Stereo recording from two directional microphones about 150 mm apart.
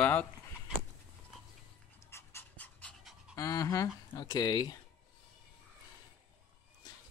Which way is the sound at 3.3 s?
20° left (ahead or behind).